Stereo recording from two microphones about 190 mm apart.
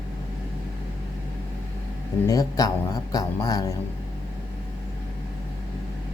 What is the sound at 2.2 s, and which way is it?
Speech, 20° left (ahead or behind).